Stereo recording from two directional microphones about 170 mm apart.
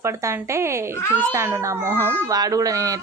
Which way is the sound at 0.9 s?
15° left (ahead or behind).